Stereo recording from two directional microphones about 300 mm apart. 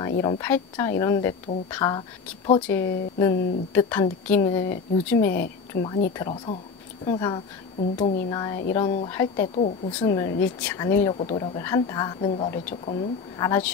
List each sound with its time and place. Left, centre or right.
0.2 s a woman's voice: centre